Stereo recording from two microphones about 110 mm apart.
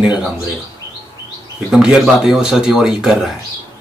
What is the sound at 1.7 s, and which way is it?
Speech, 5° right (ahead or behind).